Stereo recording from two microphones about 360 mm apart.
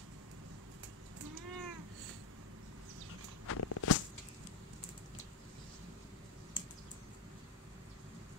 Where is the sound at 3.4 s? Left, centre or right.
Left.